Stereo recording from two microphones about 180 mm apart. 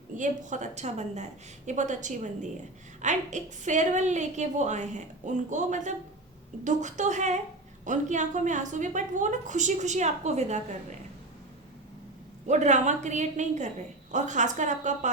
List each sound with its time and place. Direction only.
0.2 s a woman's voice: 40° right (ahead or behind)
12.5 s a woman's voice: 40° right (ahead or behind)